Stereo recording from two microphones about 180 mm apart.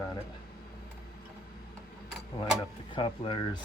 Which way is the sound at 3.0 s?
30° left (ahead or behind).